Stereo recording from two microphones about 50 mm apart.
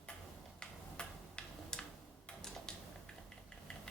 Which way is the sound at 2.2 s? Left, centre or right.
Centre.